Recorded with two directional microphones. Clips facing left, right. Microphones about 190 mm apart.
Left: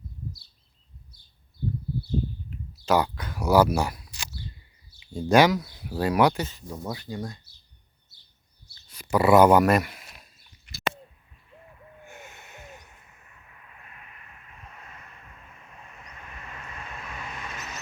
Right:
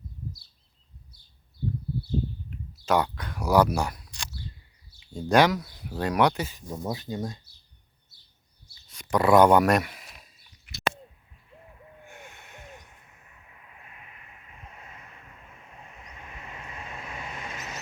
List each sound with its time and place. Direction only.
2.8 s speech: centre (ahead or behind)
6.5 s speech: 20° right (ahead or behind)
8.9 s a sound: 5° left (ahead or behind)
12.0 s snort: 5° left (ahead or behind)
16.1 s vehicle: 20° right (ahead or behind)